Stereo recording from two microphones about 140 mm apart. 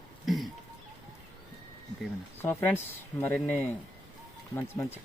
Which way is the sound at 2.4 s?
15° left (ahead or behind).